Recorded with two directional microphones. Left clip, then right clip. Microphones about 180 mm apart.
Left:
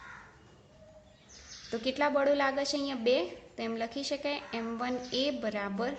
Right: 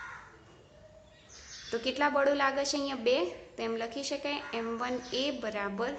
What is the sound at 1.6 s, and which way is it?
A woman's voice, 30° left (ahead or behind).